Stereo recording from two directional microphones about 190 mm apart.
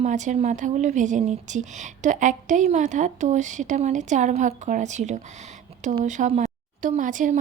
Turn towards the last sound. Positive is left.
turn(degrees=-40)  # may be behind; listen again after turning